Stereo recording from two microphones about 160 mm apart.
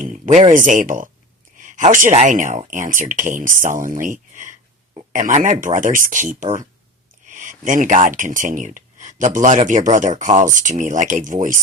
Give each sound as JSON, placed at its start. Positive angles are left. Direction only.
{"t": 0.0, "sound": "speech", "side_deg": -50}